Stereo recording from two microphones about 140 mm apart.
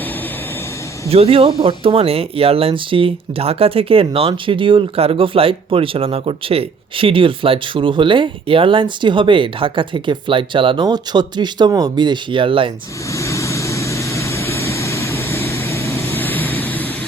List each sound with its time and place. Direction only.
1.1 s speech: 45° right (ahead or behind)
13.1 s vehicle: 20° left (ahead or behind)